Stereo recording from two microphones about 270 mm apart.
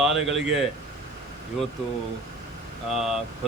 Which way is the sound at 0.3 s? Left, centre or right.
Centre.